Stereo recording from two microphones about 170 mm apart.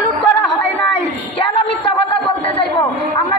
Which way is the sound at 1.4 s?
30° left (ahead or behind).